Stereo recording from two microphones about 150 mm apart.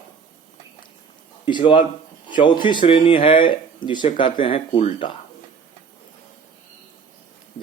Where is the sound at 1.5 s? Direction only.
30° left (ahead or behind).